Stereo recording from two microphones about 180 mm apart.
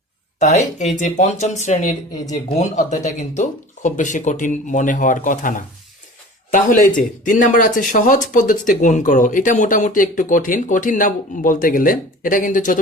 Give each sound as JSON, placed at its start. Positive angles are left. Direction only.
{"t": 0.3, "sound": "speech", "side_deg": 40}